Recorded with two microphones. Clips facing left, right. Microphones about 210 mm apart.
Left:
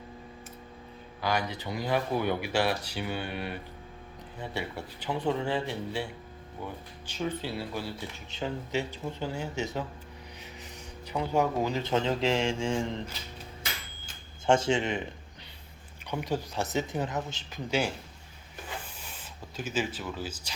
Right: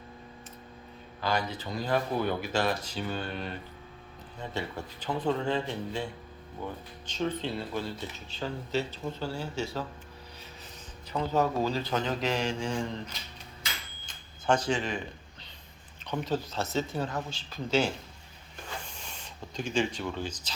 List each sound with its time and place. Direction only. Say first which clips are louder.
1.2 s speech: even; 15° left (ahead or behind)
7.1 s speech: right 1 dB; 10° left (ahead or behind)
11.1 s a man's voice: even; 15° left (ahead or behind)
14.4 s a man's voice: left 3 dB; 25° left (ahead or behind)
16.0 s speech: right 1 dB; 10° left (ahead or behind)
19.0 s speech: right 1 dB; 5° left (ahead or behind)